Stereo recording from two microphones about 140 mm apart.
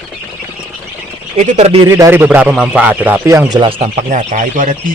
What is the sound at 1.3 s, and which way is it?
Speech, 55° right (ahead or behind).